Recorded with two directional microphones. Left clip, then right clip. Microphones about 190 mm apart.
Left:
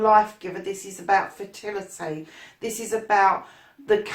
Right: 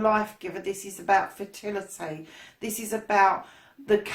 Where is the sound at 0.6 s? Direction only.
40° right (ahead or behind).